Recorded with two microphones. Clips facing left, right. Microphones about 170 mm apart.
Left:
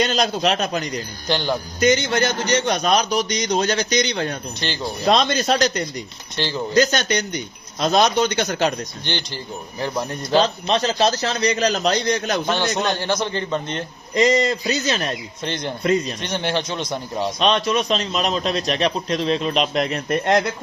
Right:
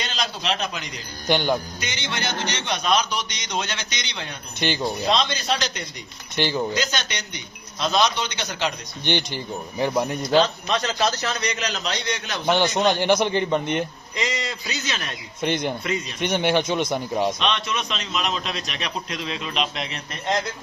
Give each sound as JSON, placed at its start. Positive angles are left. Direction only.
{"t": 0.0, "sound": "speech", "side_deg": 45}
{"t": 1.3, "sound": "speech", "side_deg": -15}
{"t": 1.8, "sound": "a man's voice", "side_deg": 45}
{"t": 4.6, "sound": "speech", "side_deg": -15}
{"t": 5.0, "sound": "speech", "side_deg": 50}
{"t": 6.3, "sound": "speech", "side_deg": -15}
{"t": 6.7, "sound": "speech", "side_deg": 45}
{"t": 9.0, "sound": "speech", "side_deg": -15}
{"t": 10.4, "sound": "a man's voice", "side_deg": 30}
{"t": 12.5, "sound": "speech", "side_deg": -15}
{"t": 14.2, "sound": "a man's voice", "side_deg": 40}
{"t": 15.4, "sound": "speech", "side_deg": -10}
{"t": 17.4, "sound": "a man's voice", "side_deg": 40}